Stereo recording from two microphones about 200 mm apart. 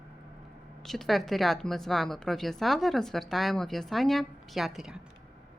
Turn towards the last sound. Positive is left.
turn(degrees=0)  # may be behind; listen again after turning